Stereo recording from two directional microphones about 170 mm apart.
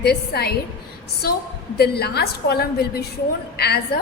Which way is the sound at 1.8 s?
70° left (ahead or behind).